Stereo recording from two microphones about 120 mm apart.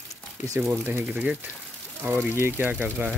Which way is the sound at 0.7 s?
20° right (ahead or behind).